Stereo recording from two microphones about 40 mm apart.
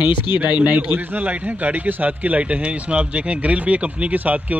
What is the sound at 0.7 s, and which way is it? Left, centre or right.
A man's voice, right.